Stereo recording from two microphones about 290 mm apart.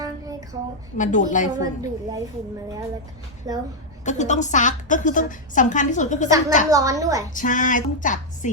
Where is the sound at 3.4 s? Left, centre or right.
Centre.